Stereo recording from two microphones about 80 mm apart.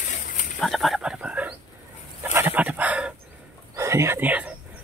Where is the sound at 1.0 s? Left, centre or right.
Centre.